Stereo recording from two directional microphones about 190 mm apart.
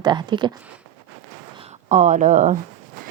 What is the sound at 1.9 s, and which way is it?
Speech, 40° right (ahead or behind).